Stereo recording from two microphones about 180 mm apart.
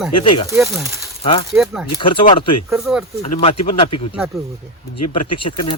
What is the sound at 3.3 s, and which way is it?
Speech, 35° left (ahead or behind).